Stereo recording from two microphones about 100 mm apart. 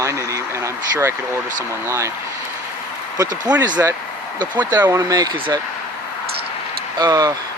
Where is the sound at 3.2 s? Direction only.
40° right (ahead or behind).